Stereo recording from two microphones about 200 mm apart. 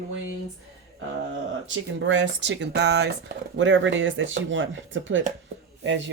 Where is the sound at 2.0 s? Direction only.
65° right (ahead or behind).